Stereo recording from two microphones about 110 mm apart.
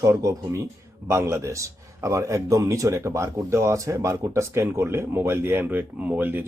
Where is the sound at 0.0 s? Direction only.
30° right (ahead or behind).